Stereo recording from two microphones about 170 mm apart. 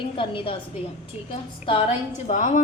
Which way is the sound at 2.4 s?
45° left (ahead or behind).